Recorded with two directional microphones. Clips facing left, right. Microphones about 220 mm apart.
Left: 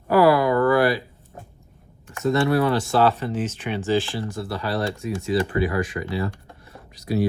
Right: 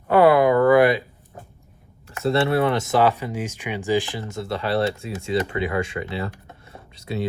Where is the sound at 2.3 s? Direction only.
25° right (ahead or behind).